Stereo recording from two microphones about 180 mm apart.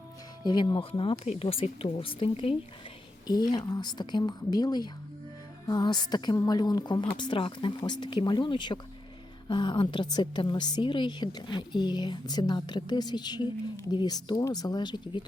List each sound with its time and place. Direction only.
0.4 s a woman's voice: 25° left (ahead or behind)